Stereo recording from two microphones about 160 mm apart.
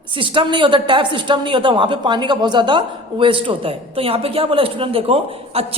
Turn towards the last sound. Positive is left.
turn(degrees=-35)  # may be behind; listen again after turning